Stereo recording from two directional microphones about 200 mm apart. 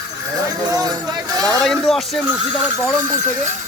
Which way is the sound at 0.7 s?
20° right (ahead or behind).